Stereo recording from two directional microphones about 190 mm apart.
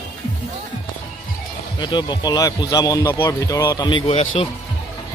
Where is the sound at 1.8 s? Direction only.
25° left (ahead or behind).